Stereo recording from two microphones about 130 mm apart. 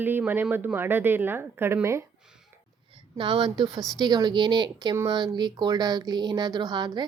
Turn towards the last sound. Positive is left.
turn(degrees=-35)  # may be behind; listen again after turning